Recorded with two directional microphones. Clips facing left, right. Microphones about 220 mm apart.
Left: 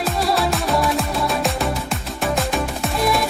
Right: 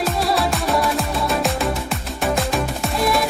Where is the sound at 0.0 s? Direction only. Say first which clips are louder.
Even; centre (ahead or behind).